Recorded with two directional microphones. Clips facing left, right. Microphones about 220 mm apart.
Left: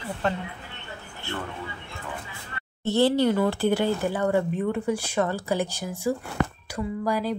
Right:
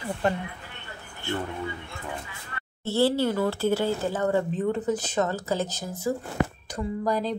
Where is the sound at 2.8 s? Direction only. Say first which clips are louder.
Left 2 dB; 20° left (ahead or behind).